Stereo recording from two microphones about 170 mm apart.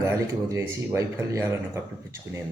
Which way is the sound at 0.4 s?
15° right (ahead or behind).